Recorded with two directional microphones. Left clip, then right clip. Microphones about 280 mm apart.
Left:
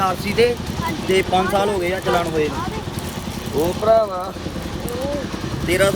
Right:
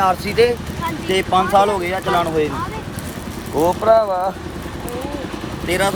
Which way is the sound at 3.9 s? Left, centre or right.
Right.